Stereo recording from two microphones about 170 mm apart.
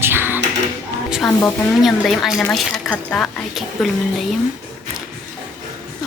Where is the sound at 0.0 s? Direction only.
15° right (ahead or behind).